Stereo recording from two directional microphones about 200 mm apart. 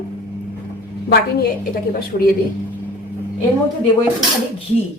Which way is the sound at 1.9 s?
45° left (ahead or behind).